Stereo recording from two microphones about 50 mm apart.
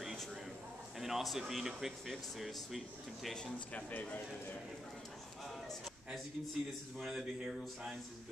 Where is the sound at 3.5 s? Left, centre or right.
Left.